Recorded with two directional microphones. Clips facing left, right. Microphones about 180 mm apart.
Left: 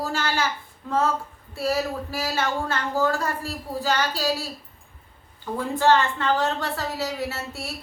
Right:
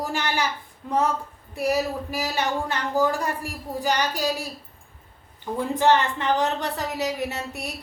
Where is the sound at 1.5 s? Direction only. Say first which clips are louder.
Right 1 dB; 15° right (ahead or behind).